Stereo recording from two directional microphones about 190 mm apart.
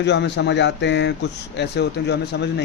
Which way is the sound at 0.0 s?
65° left (ahead or behind).